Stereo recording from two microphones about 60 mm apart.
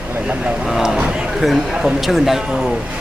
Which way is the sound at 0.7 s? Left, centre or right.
Centre.